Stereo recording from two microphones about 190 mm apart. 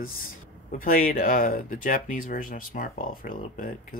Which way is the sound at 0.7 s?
45° left (ahead or behind).